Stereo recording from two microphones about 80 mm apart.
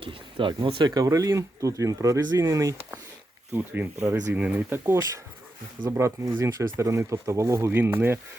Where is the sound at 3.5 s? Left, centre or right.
Right.